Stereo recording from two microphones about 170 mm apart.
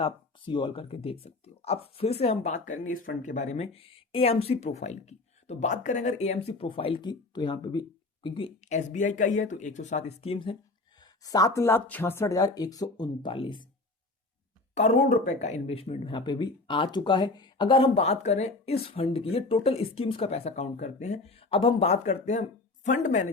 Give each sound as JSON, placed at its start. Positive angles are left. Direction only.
{"t": 0.0, "sound": "speech", "side_deg": 30}
{"t": 8.6, "sound": "speech", "side_deg": 45}
{"t": 14.8, "sound": "speech", "side_deg": 45}